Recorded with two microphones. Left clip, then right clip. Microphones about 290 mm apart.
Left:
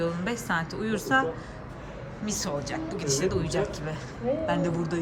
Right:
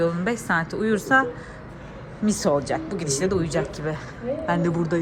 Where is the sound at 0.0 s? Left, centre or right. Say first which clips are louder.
Right 6 dB; centre.